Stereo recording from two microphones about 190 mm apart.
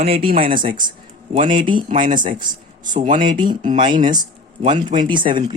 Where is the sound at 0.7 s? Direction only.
25° right (ahead or behind).